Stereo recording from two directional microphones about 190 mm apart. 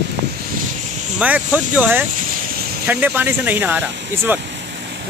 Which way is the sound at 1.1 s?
10° right (ahead or behind).